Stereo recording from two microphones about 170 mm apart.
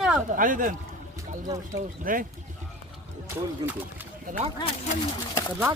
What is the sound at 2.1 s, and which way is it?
Speech, 55° right (ahead or behind).